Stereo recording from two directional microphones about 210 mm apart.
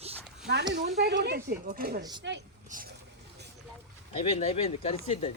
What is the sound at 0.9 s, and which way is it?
Speech, 50° right (ahead or behind).